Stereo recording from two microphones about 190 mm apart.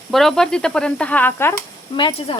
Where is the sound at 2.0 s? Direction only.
30° left (ahead or behind).